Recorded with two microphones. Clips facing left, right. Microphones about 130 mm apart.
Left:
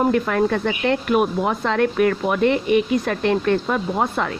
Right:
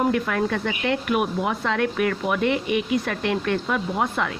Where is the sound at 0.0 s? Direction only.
40° left (ahead or behind).